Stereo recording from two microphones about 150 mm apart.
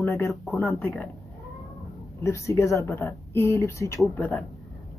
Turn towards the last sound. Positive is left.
turn(degrees=10)  # may be behind; listen again after turning